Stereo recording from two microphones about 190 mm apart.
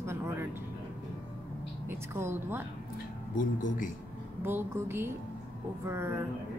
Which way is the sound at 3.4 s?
45° left (ahead or behind).